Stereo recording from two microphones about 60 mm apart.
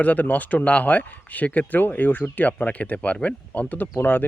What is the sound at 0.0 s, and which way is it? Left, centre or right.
Speech, left.